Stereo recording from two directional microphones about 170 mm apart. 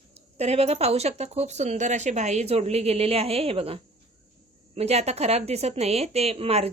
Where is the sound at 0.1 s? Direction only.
40° right (ahead or behind).